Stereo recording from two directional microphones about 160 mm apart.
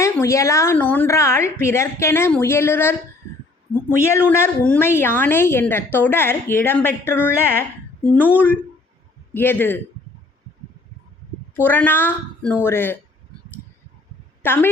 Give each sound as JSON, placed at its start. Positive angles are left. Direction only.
{"t": 0.0, "sound": "a woman's voice", "side_deg": 20}
{"t": 11.5, "sound": "a woman's voice", "side_deg": 10}
{"t": 14.4, "sound": "a woman's voice", "side_deg": 15}